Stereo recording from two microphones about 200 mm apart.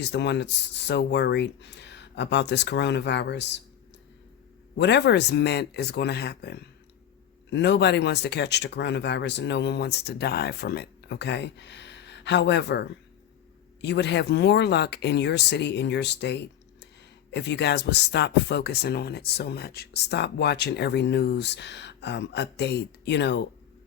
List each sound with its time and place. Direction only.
0.0 s speech: 60° left (ahead or behind)
4.8 s speech: 60° left (ahead or behind)